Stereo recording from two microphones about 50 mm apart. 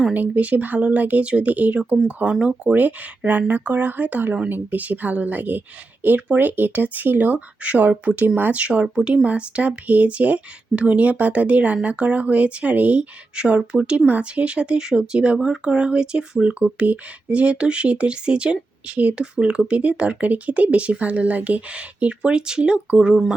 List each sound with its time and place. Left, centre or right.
0.1 s speech: right
2.4 s speech: centre
2.7 s speech: right
9.0 s speech: centre
9.2 s speech: right